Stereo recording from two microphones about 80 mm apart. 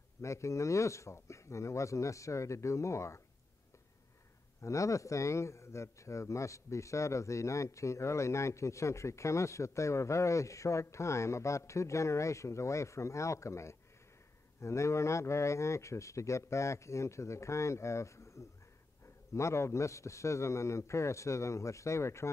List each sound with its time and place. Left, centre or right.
0.2 s speech: left
4.6 s speech: left